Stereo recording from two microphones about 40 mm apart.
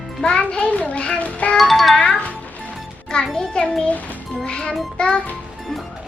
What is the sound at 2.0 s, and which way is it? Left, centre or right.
Music, left.